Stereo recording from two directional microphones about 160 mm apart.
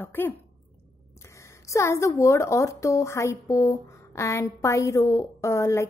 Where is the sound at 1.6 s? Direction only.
20° left (ahead or behind).